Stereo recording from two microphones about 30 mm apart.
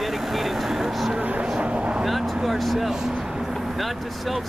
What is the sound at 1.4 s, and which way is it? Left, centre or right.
Vehicle, right.